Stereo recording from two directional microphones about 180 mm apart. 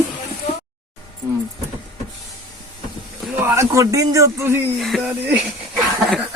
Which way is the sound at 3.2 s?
Centre (ahead or behind).